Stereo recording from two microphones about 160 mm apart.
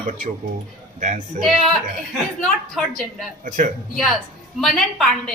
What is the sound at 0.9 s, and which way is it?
Speech, 50° right (ahead or behind).